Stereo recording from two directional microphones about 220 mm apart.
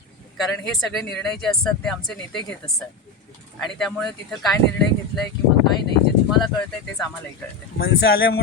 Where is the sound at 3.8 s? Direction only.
Centre (ahead or behind).